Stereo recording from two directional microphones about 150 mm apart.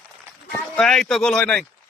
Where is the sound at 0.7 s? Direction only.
5° left (ahead or behind).